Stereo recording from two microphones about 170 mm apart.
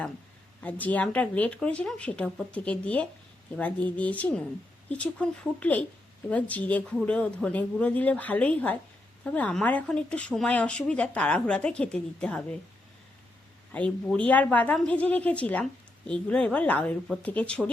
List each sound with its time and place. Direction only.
0.6 s a woman's voice: 10° left (ahead or behind)
13.7 s a woman's voice: 5° left (ahead or behind)